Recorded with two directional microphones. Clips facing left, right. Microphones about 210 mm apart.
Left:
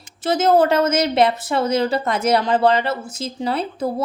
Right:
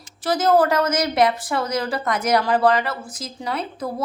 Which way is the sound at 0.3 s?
25° left (ahead or behind).